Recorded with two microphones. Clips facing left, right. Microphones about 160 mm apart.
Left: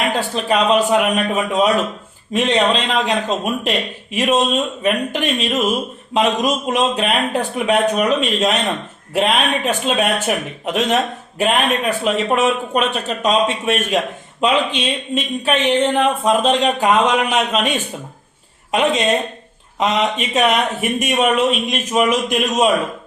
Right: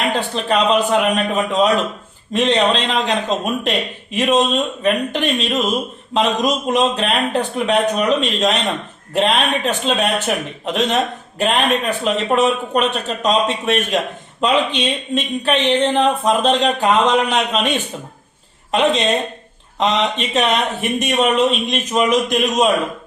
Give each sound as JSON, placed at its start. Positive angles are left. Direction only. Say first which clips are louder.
{"t": 0.2, "sound": "a man's voice", "louder": "even", "side_deg": 5}